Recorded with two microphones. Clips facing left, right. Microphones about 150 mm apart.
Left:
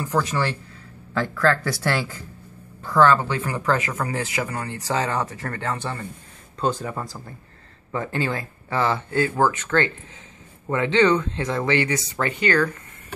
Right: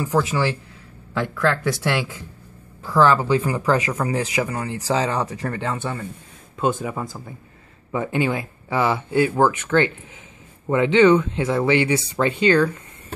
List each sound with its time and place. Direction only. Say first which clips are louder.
0.1 s speech: right 2 dB; 5° right (ahead or behind)